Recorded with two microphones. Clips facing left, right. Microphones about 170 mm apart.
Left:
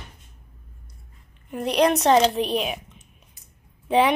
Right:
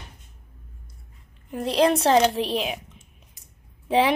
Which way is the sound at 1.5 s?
25° right (ahead or behind).